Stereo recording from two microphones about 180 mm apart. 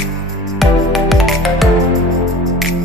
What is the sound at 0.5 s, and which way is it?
Music, centre (ahead or behind).